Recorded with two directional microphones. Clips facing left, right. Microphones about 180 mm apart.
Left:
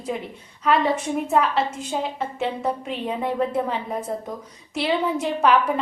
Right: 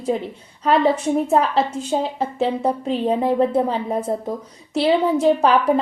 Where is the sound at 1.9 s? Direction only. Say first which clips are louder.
Right 5 dB; 35° right (ahead or behind).